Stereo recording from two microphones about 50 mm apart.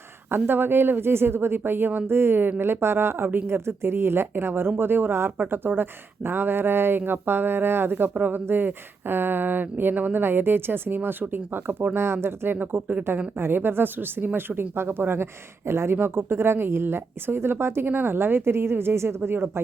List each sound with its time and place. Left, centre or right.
0.3 s speech: right